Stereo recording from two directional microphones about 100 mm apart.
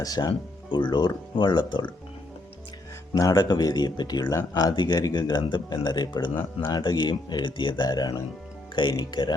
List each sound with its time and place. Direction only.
0.0 s speech: 40° left (ahead or behind)
3.2 s speech: 40° left (ahead or behind)
4.7 s speech: 50° left (ahead or behind)